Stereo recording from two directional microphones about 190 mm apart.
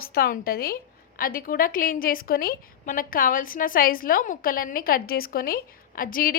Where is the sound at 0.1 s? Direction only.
50° left (ahead or behind).